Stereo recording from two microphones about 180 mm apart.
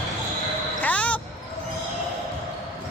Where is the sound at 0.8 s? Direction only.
5° left (ahead or behind).